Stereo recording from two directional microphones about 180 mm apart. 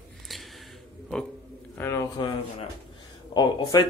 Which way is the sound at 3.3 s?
20° left (ahead or behind).